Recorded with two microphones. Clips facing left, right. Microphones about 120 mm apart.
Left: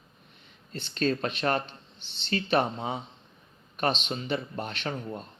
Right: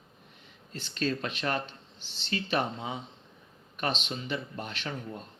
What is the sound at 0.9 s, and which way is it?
Speech, 40° left (ahead or behind).